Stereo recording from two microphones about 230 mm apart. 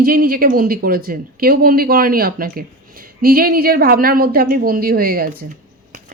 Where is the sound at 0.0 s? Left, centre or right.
Right.